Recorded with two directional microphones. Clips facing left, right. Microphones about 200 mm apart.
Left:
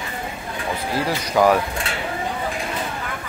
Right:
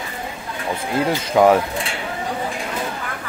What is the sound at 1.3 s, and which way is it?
Speech, 25° right (ahead or behind).